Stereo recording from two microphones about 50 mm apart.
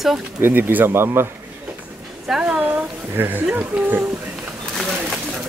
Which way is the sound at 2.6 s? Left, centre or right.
Right.